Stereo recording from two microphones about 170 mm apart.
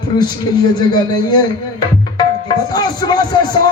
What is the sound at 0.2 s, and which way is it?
A man's voice, 25° left (ahead or behind).